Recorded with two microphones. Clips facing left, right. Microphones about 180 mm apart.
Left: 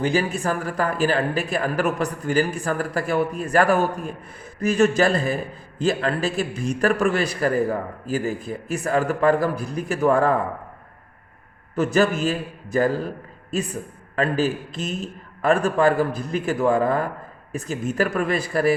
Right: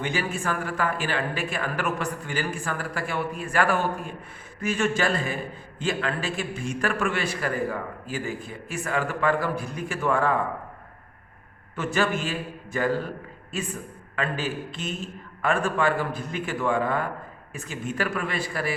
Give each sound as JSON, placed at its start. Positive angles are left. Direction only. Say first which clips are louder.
{"t": 0.0, "sound": "a man's voice", "louder": "left 6 dB", "side_deg": 35}
{"t": 11.7, "sound": "a man's voice", "louder": "left 6 dB", "side_deg": 40}